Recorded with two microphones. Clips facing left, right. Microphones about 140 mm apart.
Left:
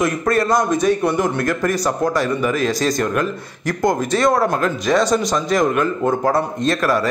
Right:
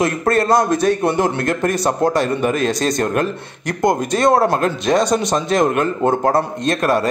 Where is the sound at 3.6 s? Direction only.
20° right (ahead or behind).